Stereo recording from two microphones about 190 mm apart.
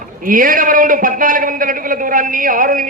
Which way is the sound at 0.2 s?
45° right (ahead or behind).